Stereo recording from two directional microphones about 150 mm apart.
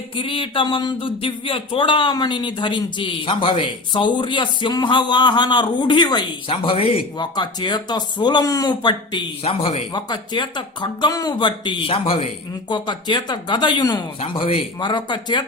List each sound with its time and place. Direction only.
0.2 s speech: 35° left (ahead or behind)
9.9 s speech: 30° left (ahead or behind)